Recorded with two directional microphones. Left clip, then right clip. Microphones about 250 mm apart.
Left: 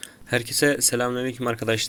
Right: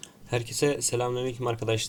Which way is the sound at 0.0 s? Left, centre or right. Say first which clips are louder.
Left 6 dB; left.